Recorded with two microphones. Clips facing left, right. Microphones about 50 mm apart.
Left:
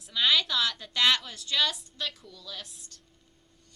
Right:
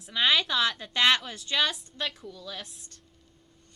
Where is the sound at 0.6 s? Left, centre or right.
Right.